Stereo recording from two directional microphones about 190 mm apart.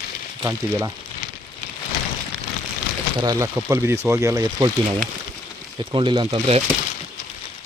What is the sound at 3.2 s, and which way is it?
Speech, 15° right (ahead or behind).